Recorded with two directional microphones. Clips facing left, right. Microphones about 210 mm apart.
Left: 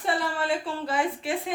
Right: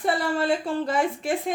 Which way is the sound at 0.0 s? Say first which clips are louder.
Right 4 dB; 45° right (ahead or behind).